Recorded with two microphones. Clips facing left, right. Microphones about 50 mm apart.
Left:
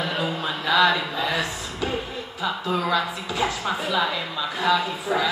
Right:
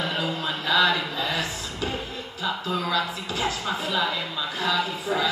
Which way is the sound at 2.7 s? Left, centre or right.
Left.